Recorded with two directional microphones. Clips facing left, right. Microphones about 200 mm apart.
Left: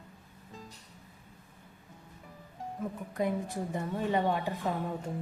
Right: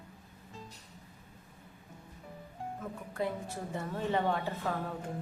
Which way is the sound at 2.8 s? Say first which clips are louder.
Left 4 dB; 15° left (ahead or behind).